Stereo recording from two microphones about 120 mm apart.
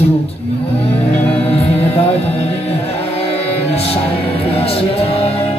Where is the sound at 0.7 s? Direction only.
60° left (ahead or behind).